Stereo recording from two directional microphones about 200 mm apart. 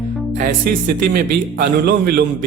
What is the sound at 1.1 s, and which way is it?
Speech, 50° right (ahead or behind).